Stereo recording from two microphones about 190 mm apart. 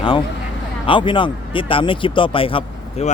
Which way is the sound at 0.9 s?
25° left (ahead or behind).